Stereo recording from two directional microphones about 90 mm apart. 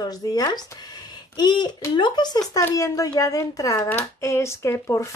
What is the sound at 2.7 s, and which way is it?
A woman's voice, 40° left (ahead or behind).